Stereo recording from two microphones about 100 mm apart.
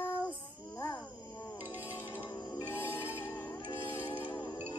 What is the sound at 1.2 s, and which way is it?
Music, 30° left (ahead or behind).